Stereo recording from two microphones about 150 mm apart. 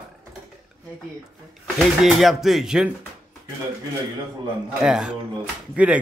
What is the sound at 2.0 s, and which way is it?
Speech, centre (ahead or behind).